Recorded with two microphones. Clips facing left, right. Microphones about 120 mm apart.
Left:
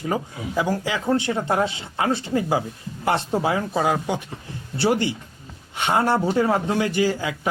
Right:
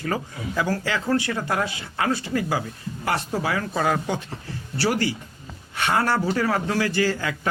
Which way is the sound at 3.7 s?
15° left (ahead or behind).